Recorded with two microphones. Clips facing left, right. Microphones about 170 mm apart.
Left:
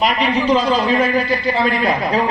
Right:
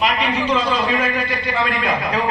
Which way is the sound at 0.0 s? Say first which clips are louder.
Left 3 dB; 35° left (ahead or behind).